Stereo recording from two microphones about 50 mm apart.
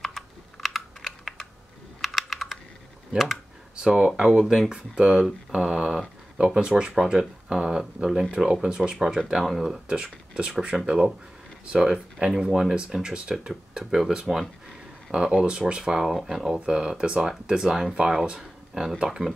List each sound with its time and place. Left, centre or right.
0.0 s computer keyboard: centre
1.0 s computer keyboard: centre
2.0 s computer keyboard: centre
3.7 s speech: centre
8.9 s speech: centre
9.8 s speech: centre
16.5 s speech: centre